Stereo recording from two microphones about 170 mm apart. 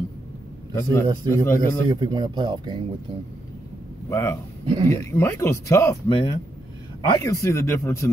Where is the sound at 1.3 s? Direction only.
15° left (ahead or behind).